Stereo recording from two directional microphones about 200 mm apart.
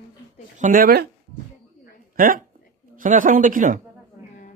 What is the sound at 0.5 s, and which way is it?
Speech, 40° right (ahead or behind).